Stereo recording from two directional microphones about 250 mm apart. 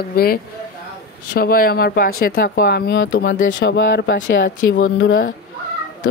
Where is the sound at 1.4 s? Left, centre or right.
Left.